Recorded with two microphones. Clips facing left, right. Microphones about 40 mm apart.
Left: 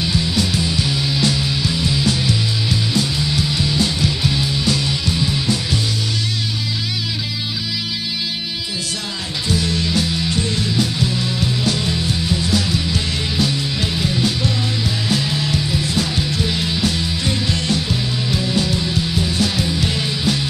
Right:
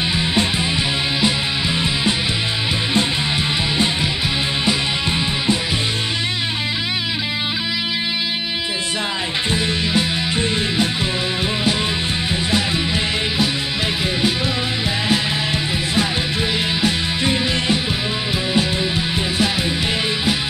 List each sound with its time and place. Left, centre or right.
0.0 s music: right
9.5 s music: right
12.3 s music: right